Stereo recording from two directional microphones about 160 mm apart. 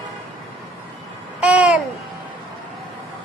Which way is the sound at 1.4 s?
5° right (ahead or behind).